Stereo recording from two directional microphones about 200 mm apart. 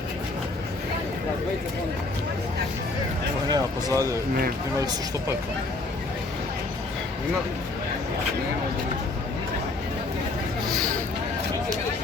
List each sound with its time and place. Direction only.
3.5 s speech: 20° right (ahead or behind)